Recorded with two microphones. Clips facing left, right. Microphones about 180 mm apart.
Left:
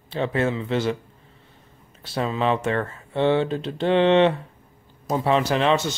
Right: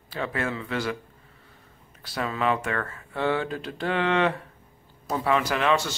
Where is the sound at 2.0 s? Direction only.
25° left (ahead or behind).